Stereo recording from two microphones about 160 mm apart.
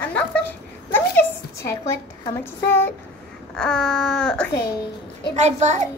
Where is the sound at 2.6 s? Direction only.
15° left (ahead or behind).